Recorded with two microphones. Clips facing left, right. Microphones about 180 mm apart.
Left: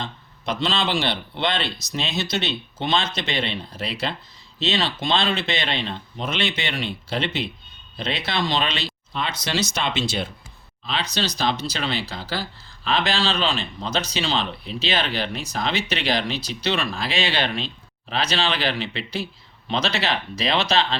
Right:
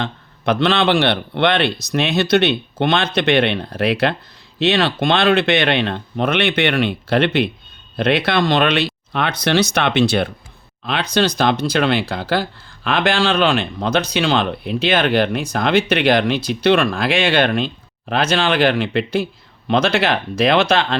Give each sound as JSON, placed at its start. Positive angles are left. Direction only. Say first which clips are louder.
{"t": 0.0, "sound": "a man's voice", "louder": "right 9 dB", "side_deg": -65}